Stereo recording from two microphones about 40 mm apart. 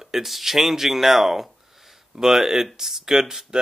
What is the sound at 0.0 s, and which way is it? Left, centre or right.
Speech, centre.